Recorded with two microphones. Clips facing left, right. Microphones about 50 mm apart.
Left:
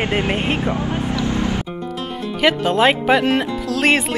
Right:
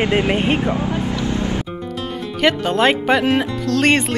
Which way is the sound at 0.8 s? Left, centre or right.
Left.